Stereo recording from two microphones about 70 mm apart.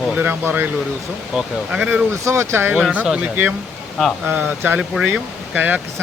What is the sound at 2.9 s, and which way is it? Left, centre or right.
Speech, centre.